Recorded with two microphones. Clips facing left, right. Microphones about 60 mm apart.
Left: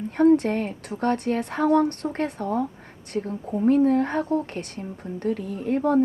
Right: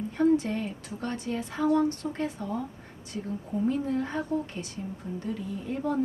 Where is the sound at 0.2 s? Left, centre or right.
Left.